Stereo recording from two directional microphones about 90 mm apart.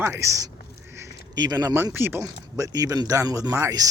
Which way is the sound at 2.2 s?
45° right (ahead or behind).